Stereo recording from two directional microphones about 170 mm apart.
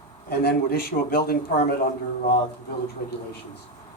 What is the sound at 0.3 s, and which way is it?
Speech, 65° left (ahead or behind).